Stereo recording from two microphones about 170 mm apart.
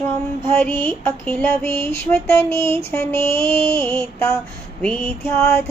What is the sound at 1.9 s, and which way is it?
Mantra, 15° left (ahead or behind).